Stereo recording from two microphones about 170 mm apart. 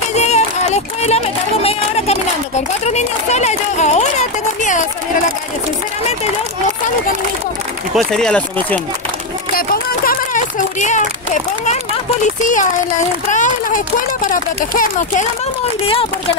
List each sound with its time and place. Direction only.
0.1 s music: 40° left (ahead or behind)
2.8 s a child's voice: 40° left (ahead or behind)
7.9 s speech: centre (ahead or behind)
9.6 s a sound: 55° left (ahead or behind)
12.4 s speech: 50° left (ahead or behind)